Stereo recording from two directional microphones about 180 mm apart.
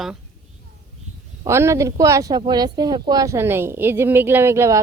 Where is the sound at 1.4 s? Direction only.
15° right (ahead or behind).